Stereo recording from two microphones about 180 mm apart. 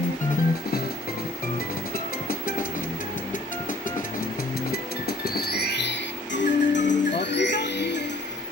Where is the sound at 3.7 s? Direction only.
50° left (ahead or behind).